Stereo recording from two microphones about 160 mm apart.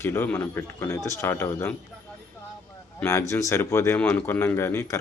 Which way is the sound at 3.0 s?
20° left (ahead or behind).